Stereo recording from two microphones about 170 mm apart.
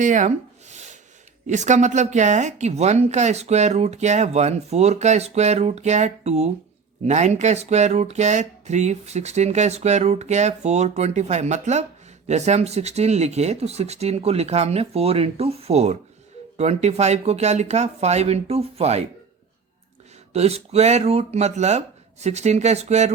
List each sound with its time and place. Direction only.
0.0 s a sound: 45° right (ahead or behind)
1.5 s speech: 45° right (ahead or behind)
20.3 s speech: 40° right (ahead or behind)